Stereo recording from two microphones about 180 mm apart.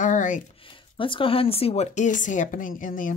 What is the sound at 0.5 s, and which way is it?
Speech, 30° left (ahead or behind).